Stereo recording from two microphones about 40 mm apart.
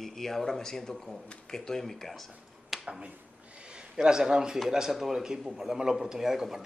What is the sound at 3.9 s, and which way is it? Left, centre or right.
A man's voice, centre.